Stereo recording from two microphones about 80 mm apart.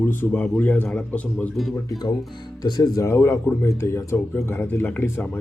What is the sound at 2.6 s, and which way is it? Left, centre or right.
Speech, left.